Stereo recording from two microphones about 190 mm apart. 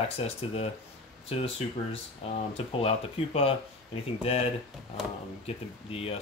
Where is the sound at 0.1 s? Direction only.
30° left (ahead or behind).